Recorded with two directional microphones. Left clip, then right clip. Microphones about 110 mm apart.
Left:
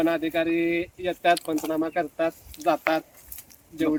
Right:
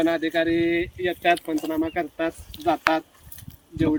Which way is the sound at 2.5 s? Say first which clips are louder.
Even; 40° left (ahead or behind).